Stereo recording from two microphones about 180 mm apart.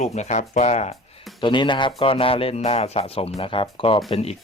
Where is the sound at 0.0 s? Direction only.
40° left (ahead or behind).